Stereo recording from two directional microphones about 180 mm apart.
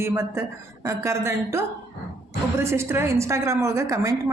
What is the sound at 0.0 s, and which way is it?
Speech, 15° right (ahead or behind).